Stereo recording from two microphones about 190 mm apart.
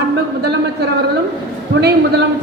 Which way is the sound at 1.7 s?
60° right (ahead or behind).